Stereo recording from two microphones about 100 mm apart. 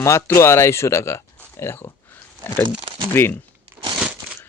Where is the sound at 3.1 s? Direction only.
20° left (ahead or behind).